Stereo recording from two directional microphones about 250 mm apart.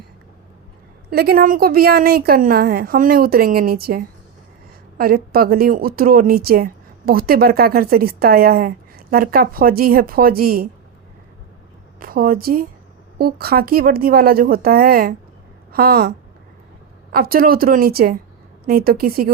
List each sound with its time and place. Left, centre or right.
1.1 s a woman's voice: right
11.9 s a woman's voice: right